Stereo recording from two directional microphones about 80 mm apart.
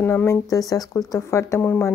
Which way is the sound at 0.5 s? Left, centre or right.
Left.